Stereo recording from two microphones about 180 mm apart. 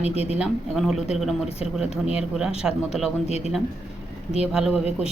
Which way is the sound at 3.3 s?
35° left (ahead or behind).